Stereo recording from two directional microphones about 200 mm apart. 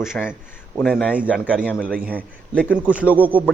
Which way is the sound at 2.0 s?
10° right (ahead or behind).